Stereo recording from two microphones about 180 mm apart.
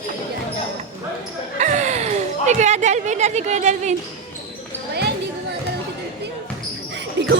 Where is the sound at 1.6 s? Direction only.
40° right (ahead or behind).